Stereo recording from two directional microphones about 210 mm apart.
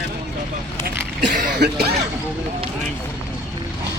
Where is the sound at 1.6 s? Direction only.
50° right (ahead or behind).